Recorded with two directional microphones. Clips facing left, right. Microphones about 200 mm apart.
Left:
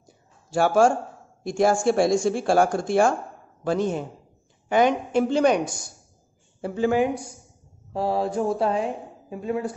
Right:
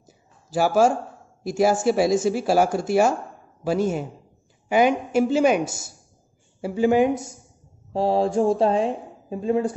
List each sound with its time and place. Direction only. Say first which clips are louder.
0.0 s a sound: right 1 dB; 5° right (ahead or behind)
1.4 s a woman's voice: right 1 dB; 5° right (ahead or behind)
6.6 s a woman's voice: right 3 dB; 10° right (ahead or behind); by 9.7 s 30° right (ahead or behind)